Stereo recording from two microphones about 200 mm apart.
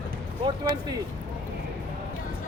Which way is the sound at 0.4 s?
20° right (ahead or behind).